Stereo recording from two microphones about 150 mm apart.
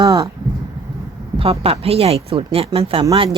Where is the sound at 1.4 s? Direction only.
40° right (ahead or behind).